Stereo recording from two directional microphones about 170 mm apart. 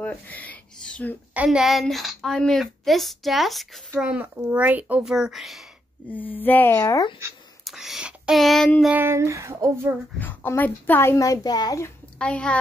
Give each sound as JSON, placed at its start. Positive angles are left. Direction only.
{"t": 0.0, "sound": "speech", "side_deg": 10}
{"t": 1.3, "sound": "a woman's voice", "side_deg": -5}
{"t": 6.0, "sound": "speech", "side_deg": 10}
{"t": 7.6, "sound": "speech", "side_deg": 0}
{"t": 8.9, "sound": "speech", "side_deg": -15}
{"t": 10.1, "sound": "speech", "side_deg": 10}
{"t": 12.2, "sound": "speech", "side_deg": 5}